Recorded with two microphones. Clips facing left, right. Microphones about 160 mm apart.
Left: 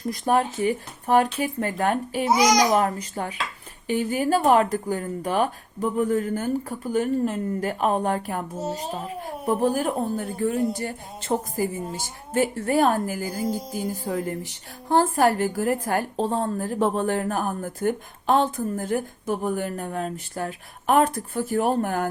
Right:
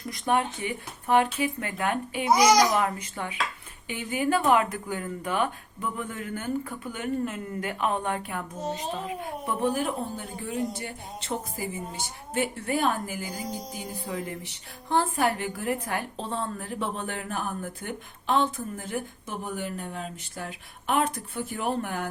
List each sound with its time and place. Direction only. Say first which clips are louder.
0.1 s speech: left 4 dB; 40° left (ahead or behind)
2.3 s a child's voice: even; centre (ahead or behind)
2.6 s a woman's voice: left 4 dB; 40° left (ahead or behind)
13.4 s a child's voice: left 8 dB; 5° left (ahead or behind)
13.7 s a woman's voice: left 7 dB; 45° left (ahead or behind)